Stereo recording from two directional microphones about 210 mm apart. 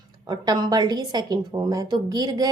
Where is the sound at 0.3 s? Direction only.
20° right (ahead or behind).